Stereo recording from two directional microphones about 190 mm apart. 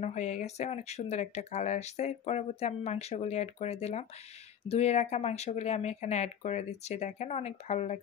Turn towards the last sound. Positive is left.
turn(degrees=35)  # may be behind; listen again after turning